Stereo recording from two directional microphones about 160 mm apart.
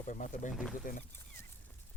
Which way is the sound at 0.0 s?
50° left (ahead or behind).